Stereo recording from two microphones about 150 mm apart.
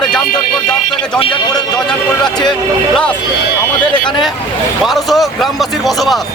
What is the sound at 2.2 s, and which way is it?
Speech, 5° left (ahead or behind).